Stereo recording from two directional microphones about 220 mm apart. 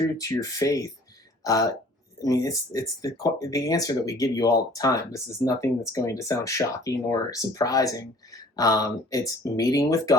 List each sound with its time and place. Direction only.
0.2 s speech: 15° left (ahead or behind)